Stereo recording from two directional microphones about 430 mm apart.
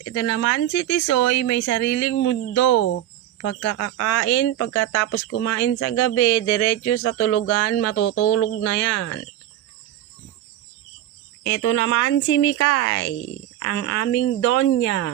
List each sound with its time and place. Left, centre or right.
0.0 s speech: left
2.7 s speech: left
7.9 s speech: left
11.4 s speech: left